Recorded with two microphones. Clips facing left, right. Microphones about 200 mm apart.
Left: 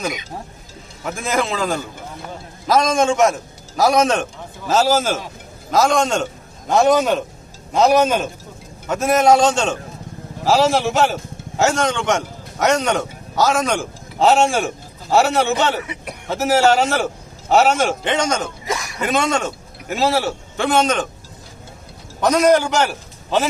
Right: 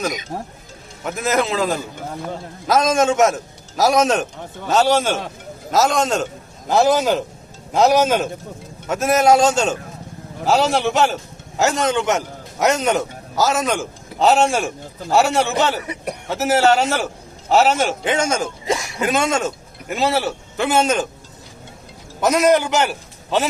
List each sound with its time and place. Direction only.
0.3 s speech: 45° right (ahead or behind)
1.0 s a man's voice: centre (ahead or behind)
18.6 s a sound: 25° right (ahead or behind)
18.9 s a man's voice: centre (ahead or behind)
22.2 s a man's voice: 5° right (ahead or behind)